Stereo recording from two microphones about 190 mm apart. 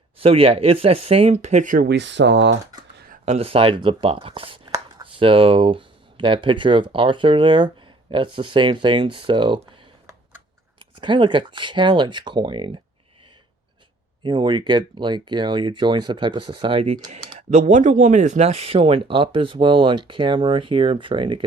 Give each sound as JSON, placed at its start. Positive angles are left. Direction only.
{"t": 0.2, "sound": "speech", "side_deg": -30}
{"t": 3.1, "sound": "speech", "side_deg": -35}
{"t": 14.3, "sound": "speech", "side_deg": -25}